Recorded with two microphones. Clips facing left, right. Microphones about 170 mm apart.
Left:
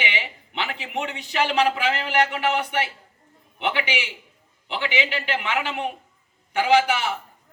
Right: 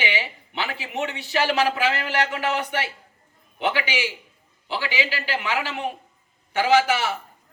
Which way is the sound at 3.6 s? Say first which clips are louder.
Right 1 dB; 40° right (ahead or behind).